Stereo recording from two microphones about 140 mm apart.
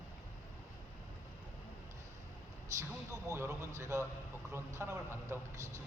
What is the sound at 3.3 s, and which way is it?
A woman's voice, 20° right (ahead or behind).